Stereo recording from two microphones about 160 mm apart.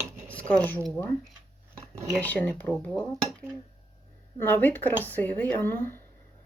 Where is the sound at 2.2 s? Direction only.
10° left (ahead or behind).